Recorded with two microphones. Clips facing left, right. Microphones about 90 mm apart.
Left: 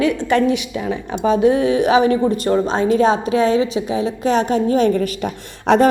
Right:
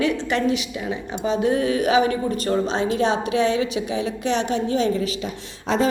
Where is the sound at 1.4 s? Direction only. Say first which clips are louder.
Left 5 dB; 30° left (ahead or behind).